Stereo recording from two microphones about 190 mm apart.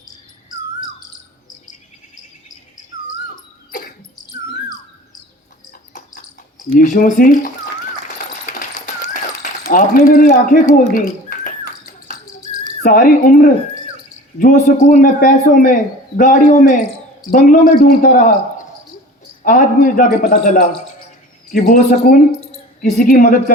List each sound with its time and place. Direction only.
3.7 s cough: 45° left (ahead or behind)
6.7 s a man's voice: 45° left (ahead or behind)
8.3 s a sound: 45° left (ahead or behind)
12.8 s a man's voice: 50° left (ahead or behind)